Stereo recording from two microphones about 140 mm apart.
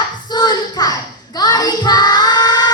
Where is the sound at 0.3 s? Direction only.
30° left (ahead or behind).